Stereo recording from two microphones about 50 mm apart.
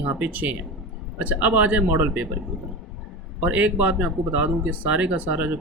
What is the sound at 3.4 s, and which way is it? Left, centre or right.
Speech, right.